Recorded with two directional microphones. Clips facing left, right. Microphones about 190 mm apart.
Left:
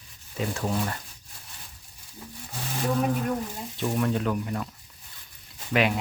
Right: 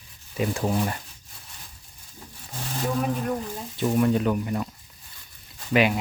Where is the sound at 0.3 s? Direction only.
15° right (ahead or behind).